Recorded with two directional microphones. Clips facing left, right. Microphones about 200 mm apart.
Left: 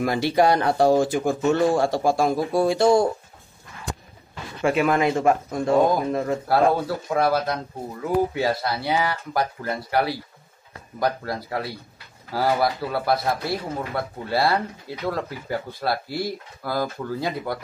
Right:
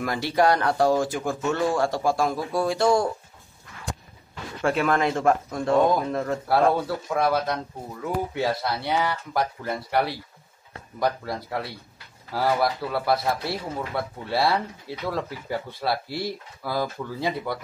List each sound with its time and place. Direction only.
0.0 s speech: 25° left (ahead or behind)
4.6 s a man's voice: 5° left (ahead or behind)